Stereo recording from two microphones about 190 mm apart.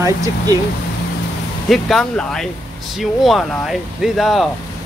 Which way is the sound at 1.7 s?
Centre (ahead or behind).